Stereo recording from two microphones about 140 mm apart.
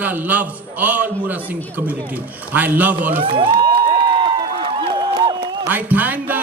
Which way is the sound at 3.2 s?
35° right (ahead or behind).